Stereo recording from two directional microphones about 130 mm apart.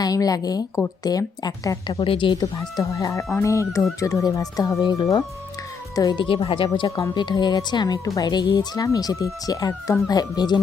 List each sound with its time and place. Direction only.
0.0 s speech: 30° left (ahead or behind)
2.0 s speech: 40° left (ahead or behind)
2.6 s speech: 25° left (ahead or behind)
6.1 s speech: 40° left (ahead or behind)